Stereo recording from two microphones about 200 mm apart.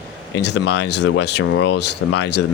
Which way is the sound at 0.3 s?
60° left (ahead or behind).